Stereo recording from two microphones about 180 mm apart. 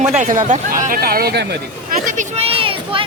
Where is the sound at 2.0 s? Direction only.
45° right (ahead or behind); by 3.0 s 30° right (ahead or behind).